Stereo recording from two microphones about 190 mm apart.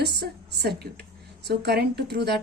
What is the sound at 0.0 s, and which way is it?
A woman's voice, 60° right (ahead or behind).